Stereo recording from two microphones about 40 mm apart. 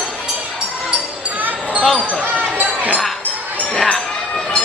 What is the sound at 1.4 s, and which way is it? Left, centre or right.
Basketball bounce, right.